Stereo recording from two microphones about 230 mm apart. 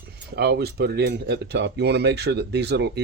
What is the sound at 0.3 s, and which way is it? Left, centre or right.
Speech, right.